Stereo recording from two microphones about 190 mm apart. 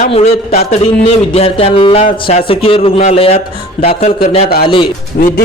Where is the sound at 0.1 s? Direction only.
30° left (ahead or behind).